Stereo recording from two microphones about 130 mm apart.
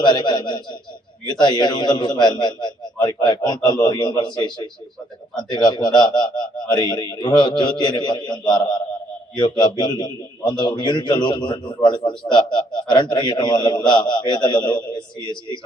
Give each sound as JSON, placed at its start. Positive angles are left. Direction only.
{"t": 0.0, "sound": "a man's voice", "side_deg": 35}